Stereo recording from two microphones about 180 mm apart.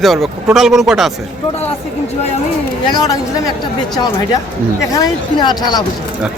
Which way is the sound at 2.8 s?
20° left (ahead or behind).